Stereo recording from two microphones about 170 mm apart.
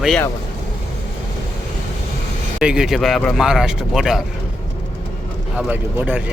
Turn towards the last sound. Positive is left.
turn(degrees=-10)  # may be behind; listen again after turning